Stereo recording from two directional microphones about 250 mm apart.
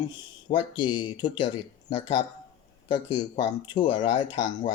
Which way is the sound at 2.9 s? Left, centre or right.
Centre.